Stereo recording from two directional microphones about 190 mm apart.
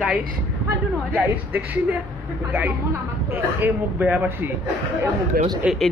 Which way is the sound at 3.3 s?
10° right (ahead or behind).